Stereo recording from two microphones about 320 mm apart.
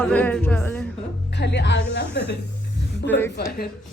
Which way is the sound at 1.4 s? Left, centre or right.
Left.